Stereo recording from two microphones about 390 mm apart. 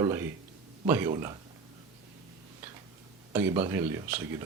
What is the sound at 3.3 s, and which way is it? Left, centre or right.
Speech, centre.